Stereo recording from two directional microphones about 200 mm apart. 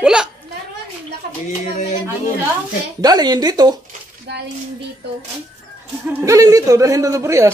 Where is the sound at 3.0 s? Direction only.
20° right (ahead or behind).